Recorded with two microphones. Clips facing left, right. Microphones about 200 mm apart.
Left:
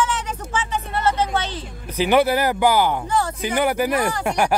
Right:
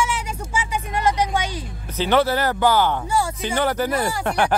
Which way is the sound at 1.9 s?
10° left (ahead or behind).